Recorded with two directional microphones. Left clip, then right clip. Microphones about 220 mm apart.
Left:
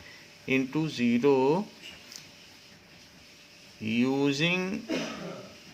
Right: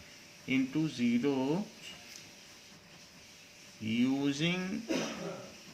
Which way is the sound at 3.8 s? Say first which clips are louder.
Left 5 dB; 40° left (ahead or behind).